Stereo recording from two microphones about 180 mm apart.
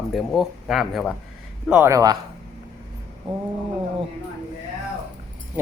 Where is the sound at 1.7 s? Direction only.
15° right (ahead or behind).